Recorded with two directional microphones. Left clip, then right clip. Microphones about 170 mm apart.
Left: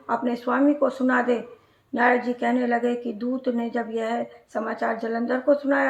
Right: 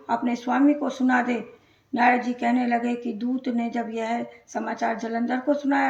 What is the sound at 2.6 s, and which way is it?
Speech, 35° left (ahead or behind).